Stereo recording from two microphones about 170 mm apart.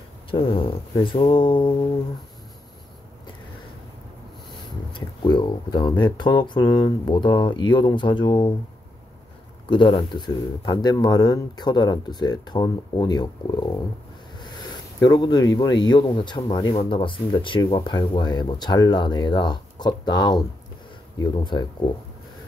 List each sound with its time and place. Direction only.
0.3 s speech: 30° left (ahead or behind)
4.9 s speech: 25° left (ahead or behind)
9.7 s speech: 25° left (ahead or behind)
15.0 s speech: 25° left (ahead or behind)